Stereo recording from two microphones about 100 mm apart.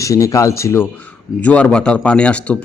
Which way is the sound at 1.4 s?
15° left (ahead or behind).